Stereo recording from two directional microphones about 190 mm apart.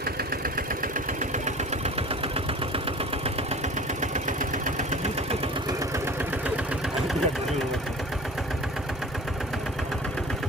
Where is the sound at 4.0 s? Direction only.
40° right (ahead or behind).